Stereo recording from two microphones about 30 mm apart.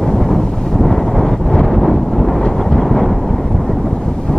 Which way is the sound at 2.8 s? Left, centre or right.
Centre.